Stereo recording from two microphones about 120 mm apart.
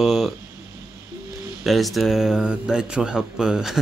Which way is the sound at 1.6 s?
Centre (ahead or behind).